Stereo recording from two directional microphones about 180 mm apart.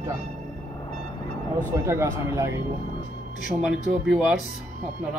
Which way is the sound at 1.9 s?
15° right (ahead or behind).